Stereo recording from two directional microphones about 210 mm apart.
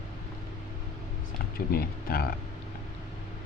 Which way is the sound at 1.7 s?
45° left (ahead or behind).